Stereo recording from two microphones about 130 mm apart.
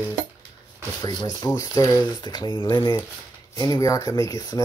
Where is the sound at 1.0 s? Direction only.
30° left (ahead or behind).